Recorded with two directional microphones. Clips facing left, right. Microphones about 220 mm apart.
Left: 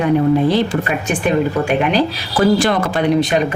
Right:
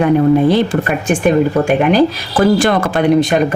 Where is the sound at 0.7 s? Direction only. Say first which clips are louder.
Right 3 dB; 40° right (ahead or behind).